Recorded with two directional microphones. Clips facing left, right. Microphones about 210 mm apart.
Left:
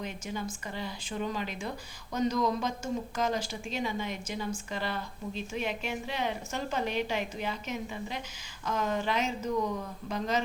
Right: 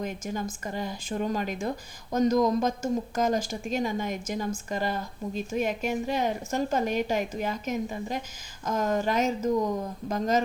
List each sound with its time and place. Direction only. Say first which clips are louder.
0.0 s speech: right 5 dB; 45° right (ahead or behind)